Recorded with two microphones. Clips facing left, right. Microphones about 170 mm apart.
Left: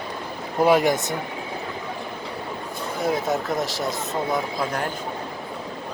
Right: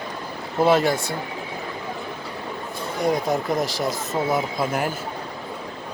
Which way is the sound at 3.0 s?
Centre (ahead or behind).